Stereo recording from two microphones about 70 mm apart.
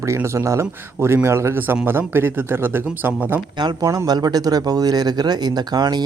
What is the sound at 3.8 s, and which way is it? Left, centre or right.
Speech, right.